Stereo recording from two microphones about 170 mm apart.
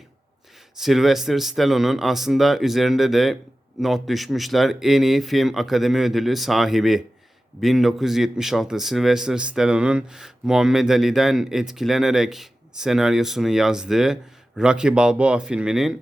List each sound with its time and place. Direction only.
0.8 s a man's voice: centre (ahead or behind)